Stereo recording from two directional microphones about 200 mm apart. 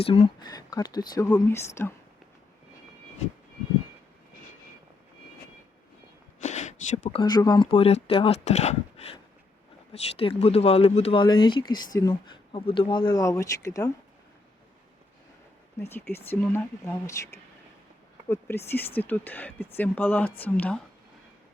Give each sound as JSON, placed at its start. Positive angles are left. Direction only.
{"t": 0.0, "sound": "speech", "side_deg": 30}
{"t": 6.4, "sound": "a sound", "side_deg": 35}
{"t": 7.1, "sound": "speech", "side_deg": 20}
{"t": 15.8, "sound": "speech", "side_deg": 10}
{"t": 18.5, "sound": "speech", "side_deg": 10}